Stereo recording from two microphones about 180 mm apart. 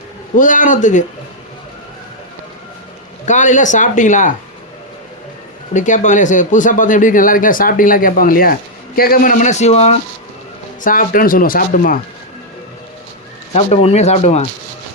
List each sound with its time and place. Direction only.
0.3 s speech: 45° left (ahead or behind)
3.2 s speech: 45° left (ahead or behind)
5.7 s speech: 45° left (ahead or behind)
10.8 s speech: 50° left (ahead or behind)
13.5 s speech: 35° left (ahead or behind)